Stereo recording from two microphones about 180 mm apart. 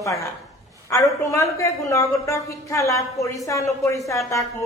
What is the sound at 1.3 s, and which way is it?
A woman's voice, 15° left (ahead or behind).